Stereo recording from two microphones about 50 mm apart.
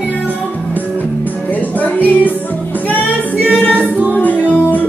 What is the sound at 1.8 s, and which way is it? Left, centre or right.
Music, left.